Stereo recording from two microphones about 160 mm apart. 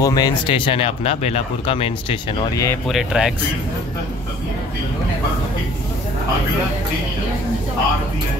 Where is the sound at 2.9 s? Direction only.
5° right (ahead or behind).